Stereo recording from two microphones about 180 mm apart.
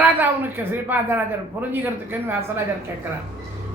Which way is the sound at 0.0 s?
10° right (ahead or behind).